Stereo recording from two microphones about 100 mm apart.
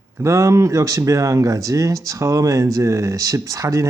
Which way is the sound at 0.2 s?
30° right (ahead or behind).